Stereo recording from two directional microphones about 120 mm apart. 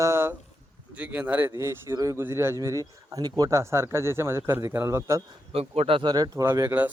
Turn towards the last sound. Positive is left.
turn(degrees=-25)  # may be behind; listen again after turning